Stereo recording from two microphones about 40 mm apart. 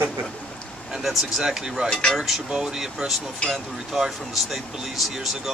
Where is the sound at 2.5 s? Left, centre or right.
Centre.